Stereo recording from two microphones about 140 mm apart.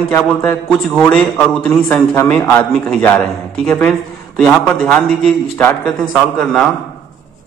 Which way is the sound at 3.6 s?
10° left (ahead or behind).